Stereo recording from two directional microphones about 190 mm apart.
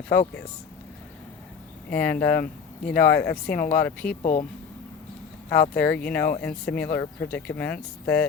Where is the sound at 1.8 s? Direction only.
10° left (ahead or behind).